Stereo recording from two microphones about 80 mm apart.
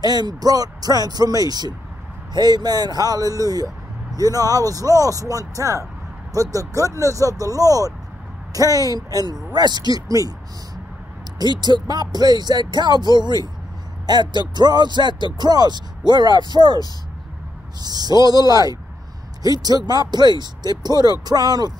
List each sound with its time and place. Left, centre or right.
0.0 s speech: right
11.6 s speech: right
17.8 s speech: right